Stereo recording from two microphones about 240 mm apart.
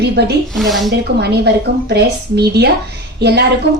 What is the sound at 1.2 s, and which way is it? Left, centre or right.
A woman's voice, right.